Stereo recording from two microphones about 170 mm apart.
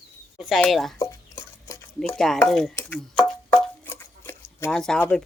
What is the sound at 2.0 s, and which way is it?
Speech, 5° left (ahead or behind).